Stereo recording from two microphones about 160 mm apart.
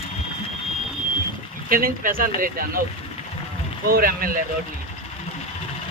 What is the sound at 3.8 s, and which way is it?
Speech, 65° right (ahead or behind).